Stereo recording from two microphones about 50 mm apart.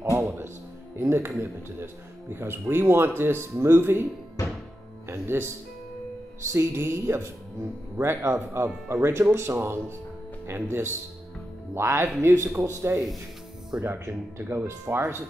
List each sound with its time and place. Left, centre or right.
0.1 s music: right
0.9 s speech: right
6.4 s speech: right
13.7 s speech: centre
14.4 s speech: right
15.0 s speech: right